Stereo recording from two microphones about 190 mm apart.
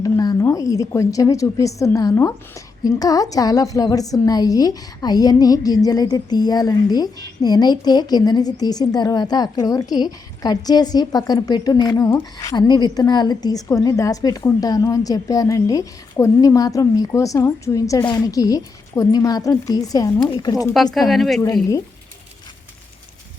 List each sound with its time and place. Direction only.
0.0 s a woman's voice: 20° left (ahead or behind)
21.1 s a woman's voice: centre (ahead or behind)
21.4 s a woman's voice: 20° left (ahead or behind)